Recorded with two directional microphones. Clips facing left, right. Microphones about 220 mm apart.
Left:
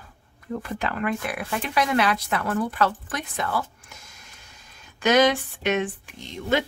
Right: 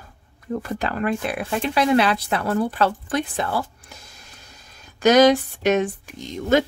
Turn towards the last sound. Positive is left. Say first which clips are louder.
# right 5 dB
turn(degrees=-40)  # may be behind; listen again after turning